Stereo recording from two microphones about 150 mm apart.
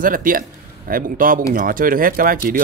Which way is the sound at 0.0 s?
65° right (ahead or behind).